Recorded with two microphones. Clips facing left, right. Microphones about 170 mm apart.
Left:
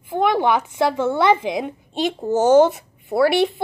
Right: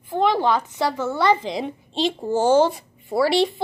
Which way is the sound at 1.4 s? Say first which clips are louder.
Left 3 dB; 55° left (ahead or behind).